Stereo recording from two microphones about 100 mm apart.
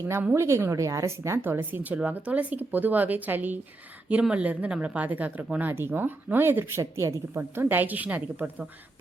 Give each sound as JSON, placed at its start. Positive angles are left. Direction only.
{"t": 0.1, "sound": "speech", "side_deg": -25}